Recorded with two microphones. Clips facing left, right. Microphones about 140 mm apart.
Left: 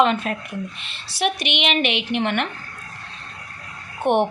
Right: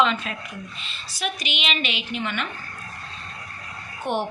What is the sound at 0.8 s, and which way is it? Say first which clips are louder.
A woman's voice: left 6 dB; 70° left (ahead or behind).